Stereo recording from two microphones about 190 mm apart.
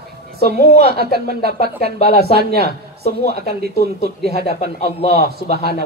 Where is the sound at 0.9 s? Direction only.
55° right (ahead or behind).